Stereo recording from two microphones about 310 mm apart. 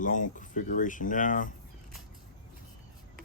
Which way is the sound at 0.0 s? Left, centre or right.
Left.